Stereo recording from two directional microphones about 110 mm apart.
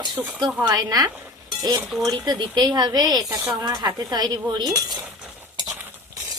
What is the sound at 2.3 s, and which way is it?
Cutlery, 40° right (ahead or behind).